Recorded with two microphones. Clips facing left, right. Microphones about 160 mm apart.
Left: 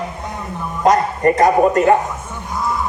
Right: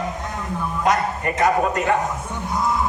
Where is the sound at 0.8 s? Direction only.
40° left (ahead or behind).